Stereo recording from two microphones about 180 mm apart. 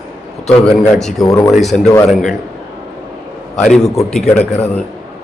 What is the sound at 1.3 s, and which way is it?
Speech, 20° left (ahead or behind).